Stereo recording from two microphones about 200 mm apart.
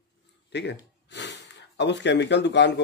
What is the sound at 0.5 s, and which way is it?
Speech, 60° left (ahead or behind).